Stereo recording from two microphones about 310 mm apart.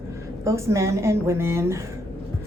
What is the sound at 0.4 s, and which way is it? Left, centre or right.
Speech, centre.